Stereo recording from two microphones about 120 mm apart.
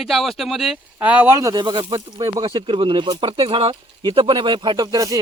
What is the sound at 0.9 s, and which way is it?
Speech, 15° right (ahead or behind).